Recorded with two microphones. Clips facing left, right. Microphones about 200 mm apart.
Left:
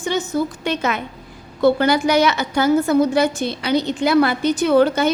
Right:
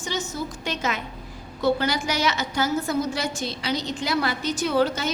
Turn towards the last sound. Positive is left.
turn(degrees=60)  # may be behind; listen again after turning